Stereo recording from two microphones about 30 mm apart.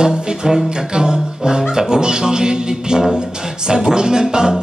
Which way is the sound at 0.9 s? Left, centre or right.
Right.